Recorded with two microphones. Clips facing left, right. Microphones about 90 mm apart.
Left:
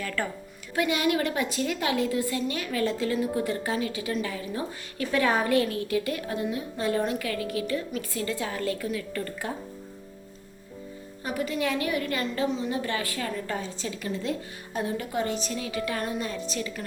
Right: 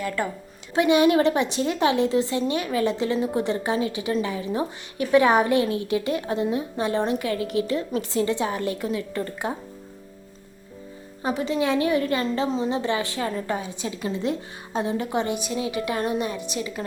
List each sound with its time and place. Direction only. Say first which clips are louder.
0.0 s a woman's voice: right 4 dB; 20° right (ahead or behind)
11.2 s a woman's voice: right 5 dB; 25° right (ahead or behind)